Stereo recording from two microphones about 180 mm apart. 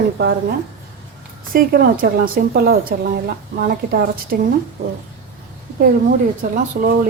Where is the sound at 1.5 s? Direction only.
50° right (ahead or behind).